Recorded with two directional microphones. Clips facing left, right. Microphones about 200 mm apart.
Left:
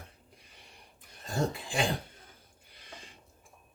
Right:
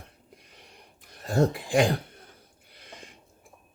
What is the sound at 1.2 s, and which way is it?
Speech, 60° right (ahead or behind).